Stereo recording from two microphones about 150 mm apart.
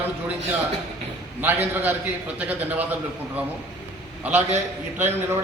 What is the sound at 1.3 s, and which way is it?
A man's voice, 10° right (ahead or behind).